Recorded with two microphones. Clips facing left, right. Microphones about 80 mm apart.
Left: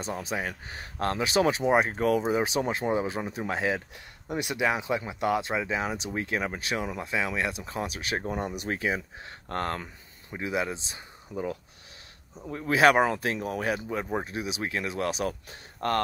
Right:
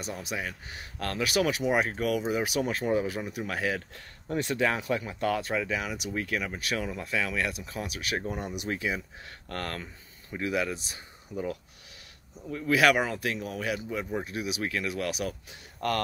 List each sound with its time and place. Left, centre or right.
0.0 s speech: left
6.7 s speech: left
14.3 s speech: left